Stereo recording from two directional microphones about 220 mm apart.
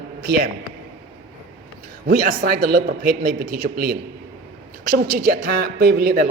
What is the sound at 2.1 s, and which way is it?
A man's voice, 40° right (ahead or behind).